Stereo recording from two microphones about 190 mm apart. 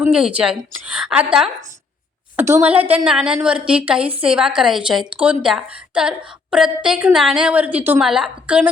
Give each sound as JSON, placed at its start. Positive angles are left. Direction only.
{"t": 0.0, "sound": "a woman's voice", "side_deg": -5}
{"t": 2.5, "sound": "a woman's voice", "side_deg": -10}